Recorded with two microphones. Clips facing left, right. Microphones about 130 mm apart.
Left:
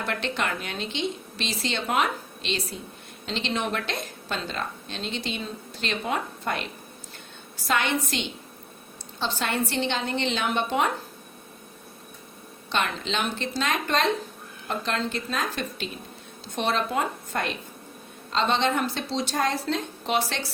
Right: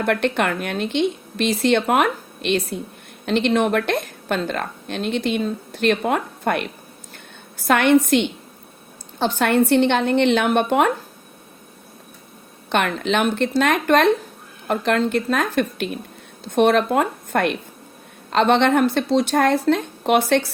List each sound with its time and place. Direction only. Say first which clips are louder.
0.0 s a woman's voice: right 9 dB; 55° right (ahead or behind)
12.7 s a woman's voice: right 8 dB; 60° right (ahead or behind)